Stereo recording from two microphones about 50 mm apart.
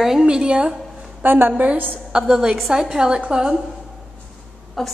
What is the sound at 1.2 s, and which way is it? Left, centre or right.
Speech, right.